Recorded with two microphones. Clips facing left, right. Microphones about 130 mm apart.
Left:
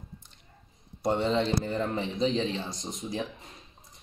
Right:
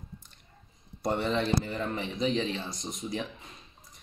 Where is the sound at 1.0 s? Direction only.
25° left (ahead or behind).